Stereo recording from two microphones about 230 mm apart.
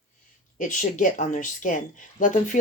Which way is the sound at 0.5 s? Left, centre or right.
Left.